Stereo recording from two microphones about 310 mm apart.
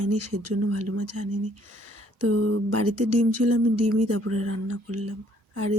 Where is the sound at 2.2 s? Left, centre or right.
Right.